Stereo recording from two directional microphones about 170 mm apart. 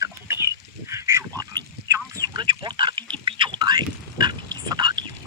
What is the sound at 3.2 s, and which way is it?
Whispering, 30° right (ahead or behind).